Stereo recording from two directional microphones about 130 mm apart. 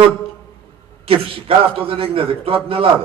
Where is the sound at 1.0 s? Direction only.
45° right (ahead or behind).